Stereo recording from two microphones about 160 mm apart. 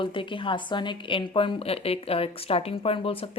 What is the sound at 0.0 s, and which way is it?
Speech, 30° left (ahead or behind).